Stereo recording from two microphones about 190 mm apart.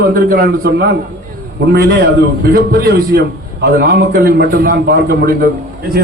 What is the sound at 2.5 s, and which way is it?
A man's voice, 50° right (ahead or behind).